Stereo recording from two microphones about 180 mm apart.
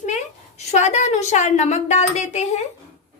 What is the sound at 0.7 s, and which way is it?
Speech, 40° left (ahead or behind).